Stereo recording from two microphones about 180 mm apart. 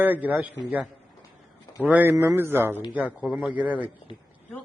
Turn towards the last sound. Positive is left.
turn(degrees=-10)  # may be behind; listen again after turning